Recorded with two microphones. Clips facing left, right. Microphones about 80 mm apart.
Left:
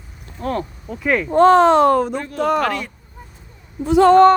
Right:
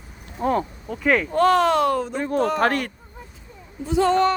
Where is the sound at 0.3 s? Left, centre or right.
Centre.